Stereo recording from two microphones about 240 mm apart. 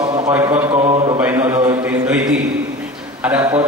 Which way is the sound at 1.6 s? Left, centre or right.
Centre.